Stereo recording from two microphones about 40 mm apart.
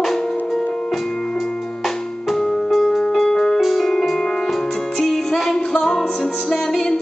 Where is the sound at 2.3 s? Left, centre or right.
Centre.